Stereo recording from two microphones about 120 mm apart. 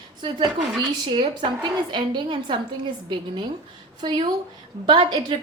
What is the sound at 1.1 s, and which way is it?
A woman's voice, 40° right (ahead or behind).